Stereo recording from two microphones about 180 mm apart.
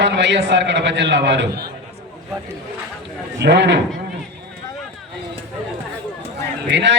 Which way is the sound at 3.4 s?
75° right (ahead or behind).